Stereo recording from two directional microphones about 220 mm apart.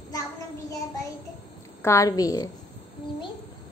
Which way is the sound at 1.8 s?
15° left (ahead or behind).